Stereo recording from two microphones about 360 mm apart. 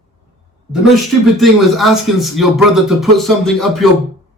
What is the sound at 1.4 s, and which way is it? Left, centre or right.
Speech, centre.